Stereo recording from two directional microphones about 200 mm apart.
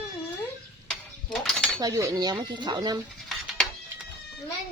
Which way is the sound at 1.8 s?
20° right (ahead or behind).